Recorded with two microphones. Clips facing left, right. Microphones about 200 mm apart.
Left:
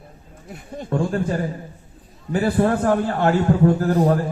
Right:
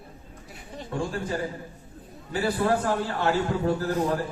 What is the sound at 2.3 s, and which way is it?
A man's voice, 50° left (ahead or behind).